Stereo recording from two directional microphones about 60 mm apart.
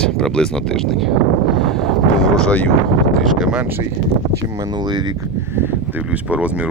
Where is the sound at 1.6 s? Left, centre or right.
Centre.